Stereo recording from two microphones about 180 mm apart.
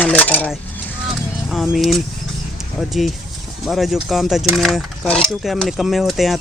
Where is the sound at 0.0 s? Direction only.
10° left (ahead or behind).